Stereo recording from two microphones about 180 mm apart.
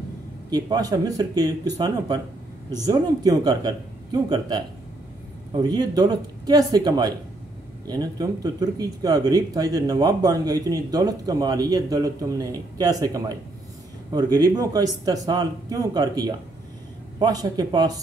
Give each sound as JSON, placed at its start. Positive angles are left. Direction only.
{"t": 0.5, "sound": "speech", "side_deg": -20}